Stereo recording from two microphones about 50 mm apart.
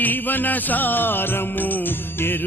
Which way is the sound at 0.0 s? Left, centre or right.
Left.